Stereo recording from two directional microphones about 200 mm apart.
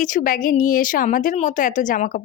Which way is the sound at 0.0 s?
40° left (ahead or behind).